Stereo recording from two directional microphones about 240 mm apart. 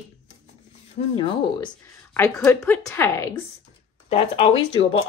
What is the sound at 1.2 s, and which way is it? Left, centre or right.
Speech, left.